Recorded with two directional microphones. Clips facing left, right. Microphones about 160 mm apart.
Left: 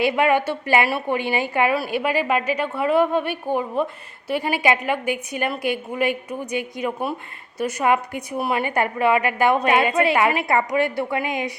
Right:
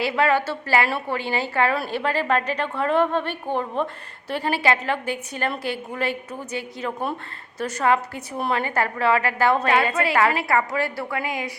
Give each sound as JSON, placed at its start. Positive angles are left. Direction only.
{"t": 0.0, "sound": "a woman's voice", "side_deg": 15}